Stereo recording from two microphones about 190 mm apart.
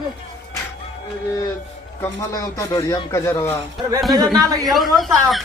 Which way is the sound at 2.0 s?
15° left (ahead or behind).